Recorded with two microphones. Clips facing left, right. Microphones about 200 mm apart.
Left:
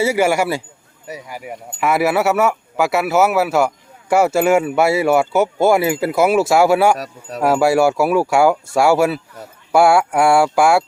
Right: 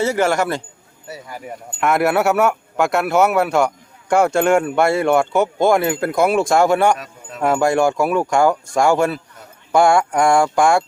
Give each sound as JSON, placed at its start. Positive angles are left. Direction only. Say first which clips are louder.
{"t": 0.0, "sound": "speech", "louder": "left 1 dB", "side_deg": 10}
{"t": 7.0, "sound": "speech", "louder": "left 6 dB", "side_deg": 40}
{"t": 7.4, "sound": "speech", "louder": "left 2 dB", "side_deg": 5}